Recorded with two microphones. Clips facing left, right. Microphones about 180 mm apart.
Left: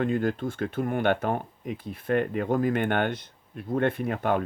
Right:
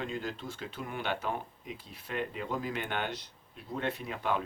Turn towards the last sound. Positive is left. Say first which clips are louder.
# left 7 dB
turn(degrees=55)  # may be behind; listen again after turning